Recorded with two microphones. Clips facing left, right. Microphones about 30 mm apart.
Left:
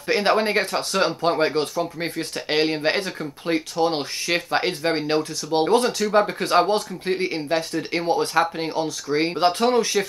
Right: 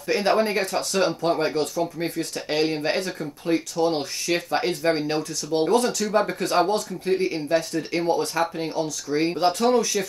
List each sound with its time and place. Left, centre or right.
0.0 s speech: left